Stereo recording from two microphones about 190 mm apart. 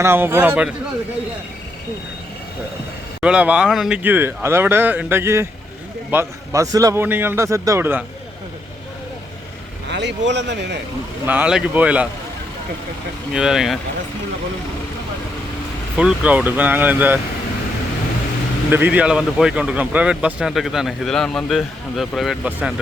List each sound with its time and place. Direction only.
0.0 s speech: 10° right (ahead or behind)
3.2 s speech: 5° right (ahead or behind)
9.9 s speech: 70° right (ahead or behind)
11.3 s speech: 5° right (ahead or behind)
13.3 s speech: centre (ahead or behind)
16.0 s speech: 5° right (ahead or behind)
18.7 s speech: 10° right (ahead or behind)